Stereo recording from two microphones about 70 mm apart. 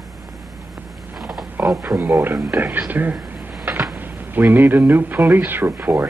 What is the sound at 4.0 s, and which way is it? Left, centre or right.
A man's voice, right.